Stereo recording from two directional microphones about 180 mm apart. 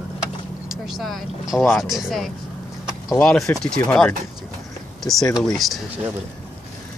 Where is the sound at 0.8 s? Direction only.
Centre (ahead or behind).